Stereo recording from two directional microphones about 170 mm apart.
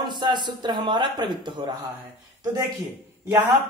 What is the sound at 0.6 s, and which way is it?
A woman's voice, 25° right (ahead or behind).